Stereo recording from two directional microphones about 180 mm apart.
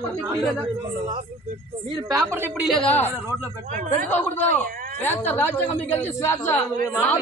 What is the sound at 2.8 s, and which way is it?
Speech, 10° left (ahead or behind).